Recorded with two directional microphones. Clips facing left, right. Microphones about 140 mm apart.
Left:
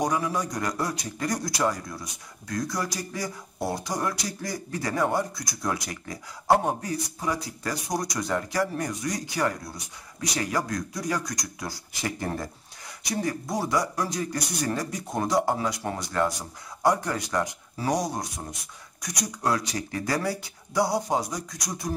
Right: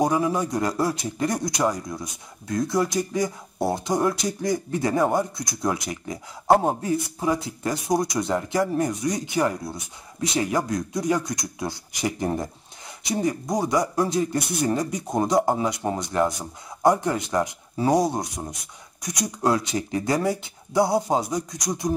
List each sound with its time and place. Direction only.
0.0 s speech: 25° right (ahead or behind)
8.9 s speech: centre (ahead or behind)
9.2 s speech: 20° right (ahead or behind)